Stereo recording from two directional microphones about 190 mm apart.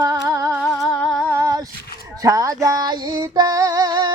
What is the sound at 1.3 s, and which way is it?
Female singing, 15° right (ahead or behind).